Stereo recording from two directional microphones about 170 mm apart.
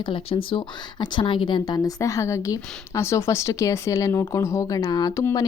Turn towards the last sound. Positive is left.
turn(degrees=20)  # may be behind; listen again after turning